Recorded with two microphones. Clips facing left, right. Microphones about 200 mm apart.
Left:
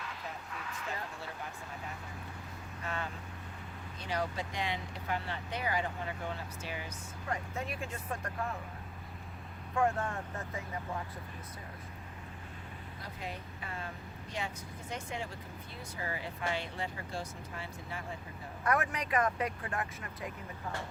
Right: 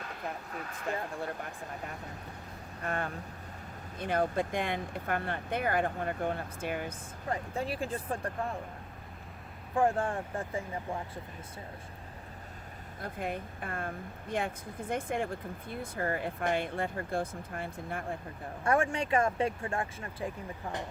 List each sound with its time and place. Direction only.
0.0 s a sound: 50° right (ahead or behind)
2.8 s speech: 55° right (ahead or behind)
7.3 s speech: 30° right (ahead or behind)
9.7 s speech: 30° right (ahead or behind)
13.0 s speech: 55° right (ahead or behind)
18.6 s speech: 30° right (ahead or behind)